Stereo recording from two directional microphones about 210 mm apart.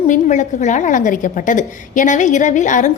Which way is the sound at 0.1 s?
35° left (ahead or behind).